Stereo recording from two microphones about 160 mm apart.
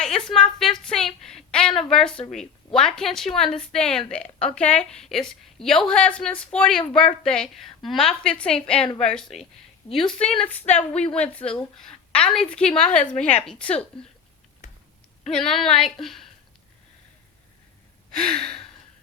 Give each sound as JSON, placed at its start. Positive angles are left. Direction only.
{"t": 0.0, "sound": "a sound", "side_deg": 5}
{"t": 1.9, "sound": "a woman's voice", "side_deg": 5}
{"t": 2.1, "sound": "gasp", "side_deg": 35}
{"t": 2.7, "sound": "a woman's voice", "side_deg": 5}
{"t": 15.4, "sound": "a woman's voice", "side_deg": 0}
{"t": 18.1, "sound": "gasp", "side_deg": 5}
{"t": 18.3, "sound": "gasp", "side_deg": 35}